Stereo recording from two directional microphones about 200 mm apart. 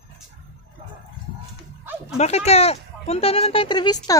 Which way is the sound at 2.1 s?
35° left (ahead or behind).